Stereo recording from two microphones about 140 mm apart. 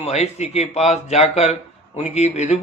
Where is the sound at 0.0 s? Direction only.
50° left (ahead or behind).